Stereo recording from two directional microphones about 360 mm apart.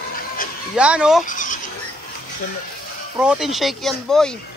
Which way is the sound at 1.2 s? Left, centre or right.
Left.